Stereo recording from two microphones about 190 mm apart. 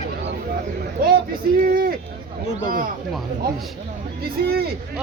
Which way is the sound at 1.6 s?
50° right (ahead or behind).